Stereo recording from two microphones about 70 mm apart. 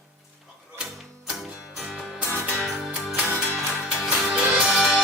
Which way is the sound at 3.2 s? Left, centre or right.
Right.